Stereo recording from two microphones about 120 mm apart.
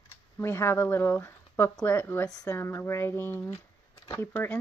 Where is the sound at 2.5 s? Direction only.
20° left (ahead or behind).